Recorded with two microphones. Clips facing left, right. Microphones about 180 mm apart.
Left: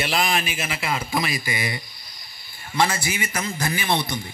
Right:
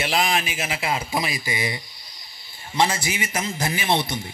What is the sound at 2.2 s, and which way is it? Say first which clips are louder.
Snake: even; 20° right (ahead or behind).